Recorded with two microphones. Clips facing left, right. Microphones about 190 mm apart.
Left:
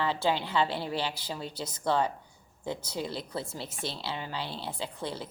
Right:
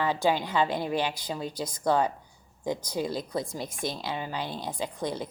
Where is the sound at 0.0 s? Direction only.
15° right (ahead or behind).